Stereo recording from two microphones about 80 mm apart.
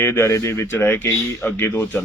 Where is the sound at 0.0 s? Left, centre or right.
Left.